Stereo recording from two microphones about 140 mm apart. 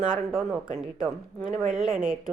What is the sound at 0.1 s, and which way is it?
Speech, 5° right (ahead or behind).